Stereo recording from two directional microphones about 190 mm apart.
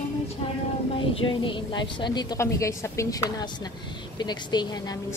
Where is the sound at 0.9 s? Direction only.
25° left (ahead or behind).